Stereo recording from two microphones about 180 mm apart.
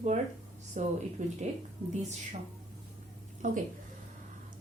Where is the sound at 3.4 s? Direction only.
45° right (ahead or behind).